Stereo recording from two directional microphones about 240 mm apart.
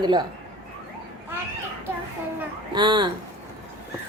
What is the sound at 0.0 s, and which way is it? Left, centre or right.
Speech, centre.